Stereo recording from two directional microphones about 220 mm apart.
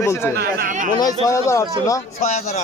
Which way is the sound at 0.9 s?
15° left (ahead or behind).